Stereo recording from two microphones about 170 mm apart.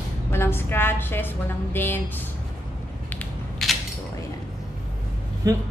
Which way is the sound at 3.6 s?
Centre (ahead or behind).